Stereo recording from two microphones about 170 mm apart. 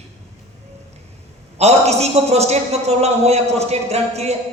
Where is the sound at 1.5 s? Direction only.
40° right (ahead or behind).